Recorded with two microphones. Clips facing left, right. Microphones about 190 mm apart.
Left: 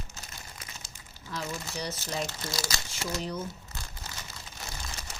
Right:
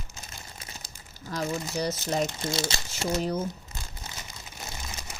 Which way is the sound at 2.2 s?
25° right (ahead or behind).